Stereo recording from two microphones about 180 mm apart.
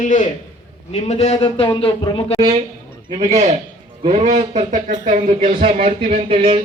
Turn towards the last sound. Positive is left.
turn(degrees=-35)  # may be behind; listen again after turning